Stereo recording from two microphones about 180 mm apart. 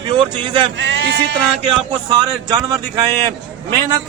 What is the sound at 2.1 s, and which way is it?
A man's voice, 25° right (ahead or behind).